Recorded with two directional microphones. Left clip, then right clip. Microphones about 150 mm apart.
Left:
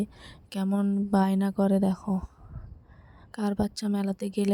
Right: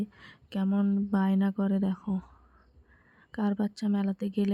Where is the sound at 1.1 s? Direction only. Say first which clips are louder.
Left 7 dB; 45° left (ahead or behind).